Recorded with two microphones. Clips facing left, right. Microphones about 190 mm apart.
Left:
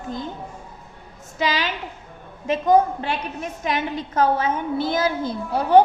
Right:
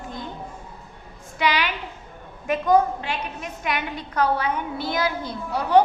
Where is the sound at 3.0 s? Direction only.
35° left (ahead or behind).